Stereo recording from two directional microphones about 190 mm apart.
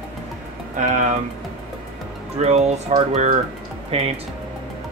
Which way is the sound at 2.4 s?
35° right (ahead or behind).